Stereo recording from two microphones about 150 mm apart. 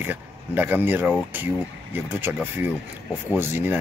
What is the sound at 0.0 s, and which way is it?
Speech, 10° right (ahead or behind).